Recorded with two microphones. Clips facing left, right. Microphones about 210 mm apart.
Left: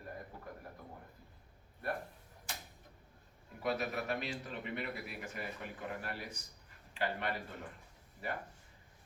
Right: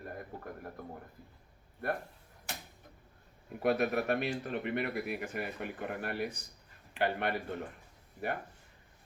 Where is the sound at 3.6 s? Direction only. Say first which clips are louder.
Right 7 dB; 60° right (ahead or behind).